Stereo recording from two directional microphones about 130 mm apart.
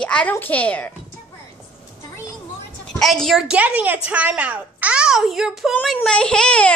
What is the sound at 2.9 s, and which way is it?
A woman's voice, 5° left (ahead or behind).